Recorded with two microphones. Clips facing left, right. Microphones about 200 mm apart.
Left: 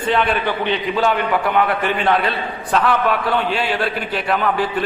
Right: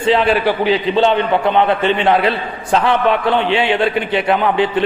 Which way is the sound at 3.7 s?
Centre (ahead or behind).